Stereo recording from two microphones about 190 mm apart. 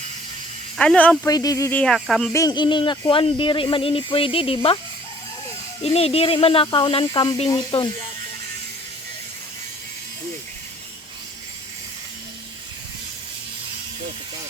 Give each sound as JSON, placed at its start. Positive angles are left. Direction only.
{"t": 0.8, "sound": "speech", "side_deg": 5}
{"t": 1.3, "sound": "speech", "side_deg": 20}
{"t": 1.8, "sound": "speech", "side_deg": 0}
{"t": 2.3, "sound": "speech", "side_deg": 20}
{"t": 5.8, "sound": "speech", "side_deg": 30}